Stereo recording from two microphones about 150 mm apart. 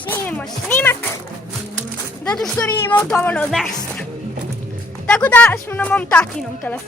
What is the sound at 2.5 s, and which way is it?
Speech, 15° left (ahead or behind).